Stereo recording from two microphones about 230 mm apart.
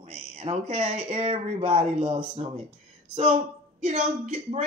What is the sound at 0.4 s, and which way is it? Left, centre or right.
Speech, right.